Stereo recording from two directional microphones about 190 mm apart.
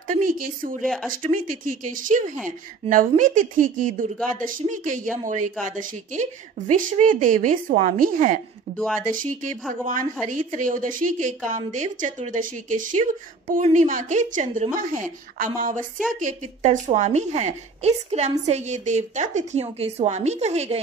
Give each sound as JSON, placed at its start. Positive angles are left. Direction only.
{"t": 0.1, "sound": "a woman's voice", "side_deg": -45}
{"t": 8.7, "sound": "speech", "side_deg": 5}
{"t": 9.0, "sound": "a woman's voice", "side_deg": -45}